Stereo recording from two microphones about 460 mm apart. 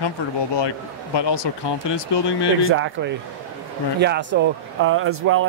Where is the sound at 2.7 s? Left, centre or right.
Right.